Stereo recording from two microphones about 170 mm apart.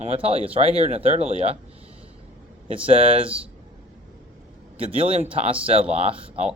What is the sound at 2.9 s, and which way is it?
Speech, 35° right (ahead or behind).